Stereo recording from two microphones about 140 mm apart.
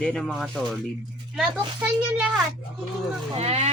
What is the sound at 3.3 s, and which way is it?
Speech, 50° right (ahead or behind).